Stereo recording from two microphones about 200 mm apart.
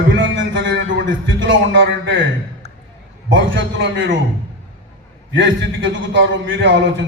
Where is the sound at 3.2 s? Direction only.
65° right (ahead or behind).